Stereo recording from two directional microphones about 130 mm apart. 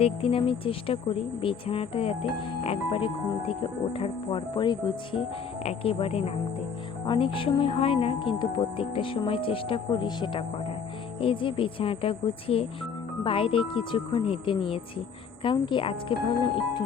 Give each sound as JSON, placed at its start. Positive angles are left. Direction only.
{"t": 0.0, "sound": "speech", "side_deg": 45}
{"t": 5.6, "sound": "speech", "side_deg": 45}